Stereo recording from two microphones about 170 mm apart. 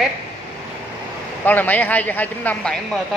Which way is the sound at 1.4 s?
10° left (ahead or behind).